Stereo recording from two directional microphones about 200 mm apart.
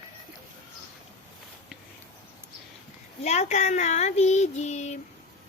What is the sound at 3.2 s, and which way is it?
Speech, 35° left (ahead or behind).